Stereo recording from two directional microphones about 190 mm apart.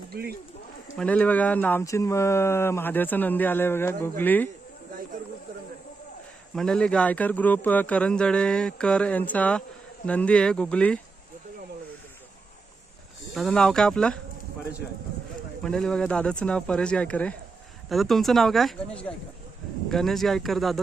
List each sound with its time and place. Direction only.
0.1 s speech: 55° right (ahead or behind)
0.9 s speech: 5° left (ahead or behind)
6.6 s speech: 5° left (ahead or behind)
13.3 s speech: centre (ahead or behind)
15.6 s speech: 5° left (ahead or behind)